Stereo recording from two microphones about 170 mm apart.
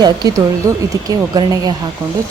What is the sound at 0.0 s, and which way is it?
A woman's voice, 25° right (ahead or behind).